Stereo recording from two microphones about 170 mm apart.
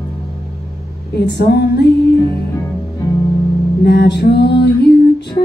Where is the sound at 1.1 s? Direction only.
80° left.